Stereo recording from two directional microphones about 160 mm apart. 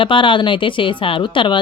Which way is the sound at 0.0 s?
30° left (ahead or behind).